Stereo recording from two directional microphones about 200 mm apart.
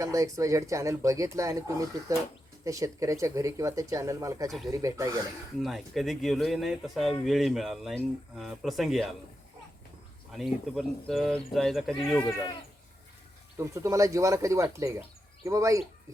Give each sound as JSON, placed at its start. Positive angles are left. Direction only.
{"t": 0.0, "sound": "speech", "side_deg": -15}
{"t": 5.5, "sound": "speech", "side_deg": 0}
{"t": 10.3, "sound": "speech", "side_deg": 0}
{"t": 13.6, "sound": "speech", "side_deg": -15}